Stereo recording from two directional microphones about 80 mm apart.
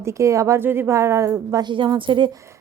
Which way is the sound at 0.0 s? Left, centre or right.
Right.